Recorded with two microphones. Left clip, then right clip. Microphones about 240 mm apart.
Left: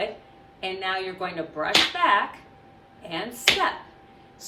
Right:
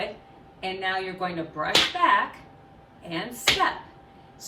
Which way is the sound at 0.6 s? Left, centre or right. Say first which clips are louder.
Even; centre.